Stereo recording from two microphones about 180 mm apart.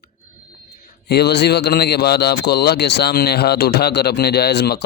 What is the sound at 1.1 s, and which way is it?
Speech, 65° left (ahead or behind).